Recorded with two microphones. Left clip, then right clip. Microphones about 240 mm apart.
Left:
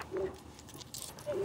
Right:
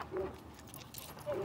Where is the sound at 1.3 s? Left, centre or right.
Left.